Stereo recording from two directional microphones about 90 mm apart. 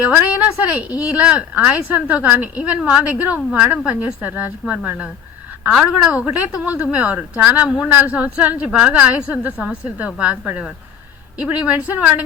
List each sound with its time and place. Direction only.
0.0 s speech: 15° right (ahead or behind)